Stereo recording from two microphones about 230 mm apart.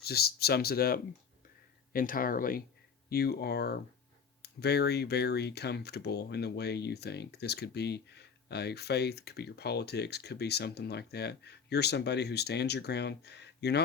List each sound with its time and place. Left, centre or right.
0.0 s speech: left